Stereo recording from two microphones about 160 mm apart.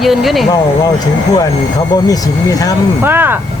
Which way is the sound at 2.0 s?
25° left (ahead or behind).